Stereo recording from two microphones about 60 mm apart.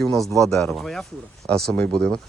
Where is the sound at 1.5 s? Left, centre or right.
Centre.